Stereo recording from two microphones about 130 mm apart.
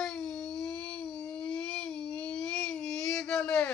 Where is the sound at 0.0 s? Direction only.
Centre (ahead or behind).